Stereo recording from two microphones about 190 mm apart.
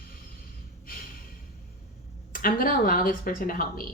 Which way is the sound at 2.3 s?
50° left (ahead or behind).